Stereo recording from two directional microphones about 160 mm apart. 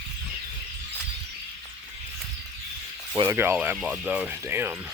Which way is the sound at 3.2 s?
15° right (ahead or behind).